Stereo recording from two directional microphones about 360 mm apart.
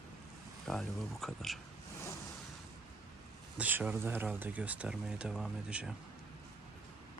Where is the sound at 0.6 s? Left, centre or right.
Centre.